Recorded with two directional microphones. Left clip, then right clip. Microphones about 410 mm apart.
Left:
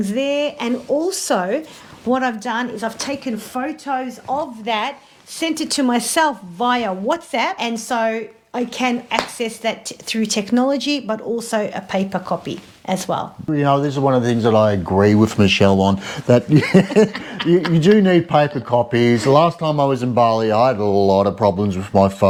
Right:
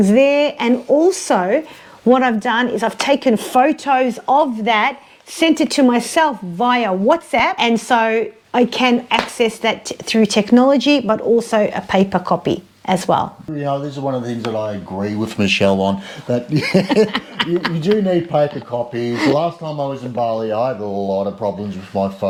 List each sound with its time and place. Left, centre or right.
0.1 s speech: right
7.5 s speech: right
13.6 s speech: left
15.4 s speech: left
17.1 s speech: right
17.7 s speech: left
18.7 s speech: left